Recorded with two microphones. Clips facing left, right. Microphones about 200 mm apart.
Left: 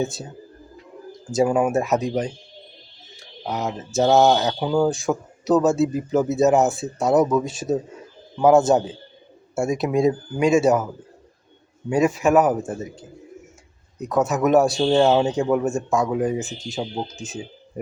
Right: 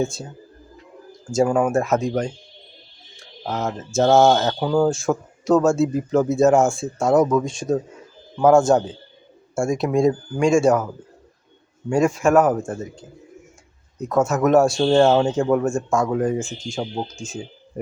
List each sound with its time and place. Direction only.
0.0 s speech: centre (ahead or behind)
1.3 s speech: 5° left (ahead or behind)
3.4 s speech: centre (ahead or behind)
11.9 s speech: 5° left (ahead or behind)
14.0 s speech: centre (ahead or behind)
16.5 s speech: 20° left (ahead or behind)